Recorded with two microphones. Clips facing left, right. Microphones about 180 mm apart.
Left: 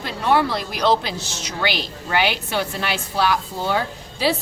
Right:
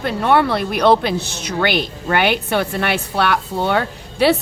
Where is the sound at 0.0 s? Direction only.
55° right (ahead or behind).